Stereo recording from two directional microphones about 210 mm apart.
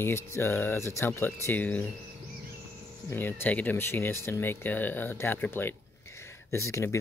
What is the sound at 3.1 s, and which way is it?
Speech, 10° left (ahead or behind).